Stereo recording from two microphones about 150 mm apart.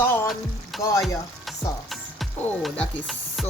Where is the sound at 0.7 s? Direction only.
Centre (ahead or behind).